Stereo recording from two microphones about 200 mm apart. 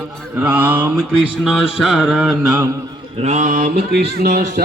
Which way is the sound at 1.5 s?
Centre (ahead or behind).